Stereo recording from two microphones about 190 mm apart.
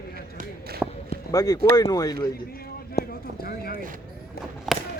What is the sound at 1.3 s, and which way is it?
Speech, 20° left (ahead or behind).